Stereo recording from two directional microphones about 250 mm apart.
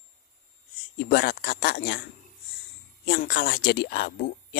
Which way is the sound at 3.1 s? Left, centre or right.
Left.